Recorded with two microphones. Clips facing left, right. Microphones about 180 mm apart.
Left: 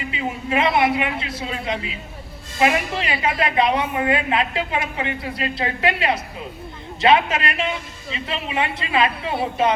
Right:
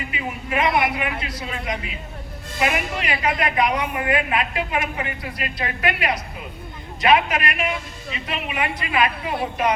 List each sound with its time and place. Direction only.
0.1 s a woman's voice: 25° left (ahead or behind)